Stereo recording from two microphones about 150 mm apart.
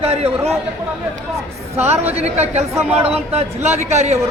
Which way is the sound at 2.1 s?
50° right (ahead or behind).